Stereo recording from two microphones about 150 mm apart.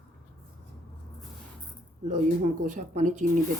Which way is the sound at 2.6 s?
55° right (ahead or behind).